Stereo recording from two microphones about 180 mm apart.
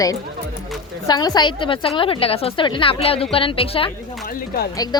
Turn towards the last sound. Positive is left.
turn(degrees=20)  # may be behind; listen again after turning